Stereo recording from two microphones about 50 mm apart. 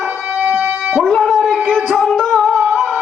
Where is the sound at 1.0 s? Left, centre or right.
Centre.